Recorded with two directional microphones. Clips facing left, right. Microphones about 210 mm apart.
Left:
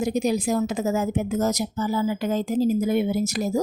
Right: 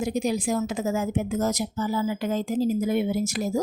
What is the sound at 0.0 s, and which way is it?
A woman's voice, 40° left (ahead or behind).